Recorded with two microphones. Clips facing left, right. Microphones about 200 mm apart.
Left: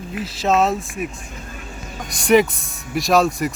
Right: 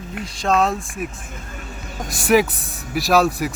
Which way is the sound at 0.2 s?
5° left (ahead or behind).